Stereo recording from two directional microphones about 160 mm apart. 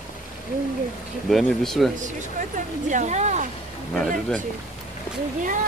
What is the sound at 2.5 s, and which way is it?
Speech, 50° right (ahead or behind).